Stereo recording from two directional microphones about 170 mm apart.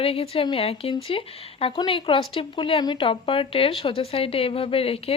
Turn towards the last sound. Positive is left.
turn(degrees=35)  # may be behind; listen again after turning